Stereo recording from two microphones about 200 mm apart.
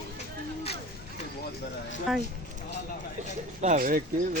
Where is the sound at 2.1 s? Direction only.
Centre (ahead or behind).